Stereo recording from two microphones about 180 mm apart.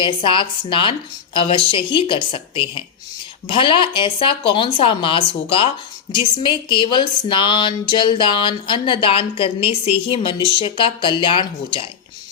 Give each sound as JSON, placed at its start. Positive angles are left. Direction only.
{"t": 0.0, "sound": "speech", "side_deg": 30}